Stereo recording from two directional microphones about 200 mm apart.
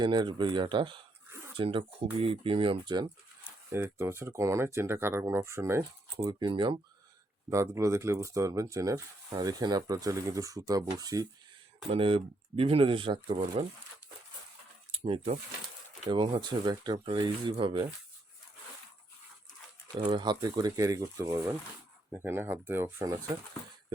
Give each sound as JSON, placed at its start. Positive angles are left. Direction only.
{"t": 0.0, "sound": "speech", "side_deg": -20}
{"t": 6.1, "sound": "speech", "side_deg": -25}
{"t": 11.9, "sound": "speech", "side_deg": -25}
{"t": 14.9, "sound": "speech", "side_deg": -30}
{"t": 20.1, "sound": "speech", "side_deg": -20}